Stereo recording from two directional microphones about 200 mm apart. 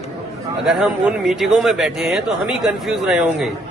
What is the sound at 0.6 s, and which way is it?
Speech, centre (ahead or behind).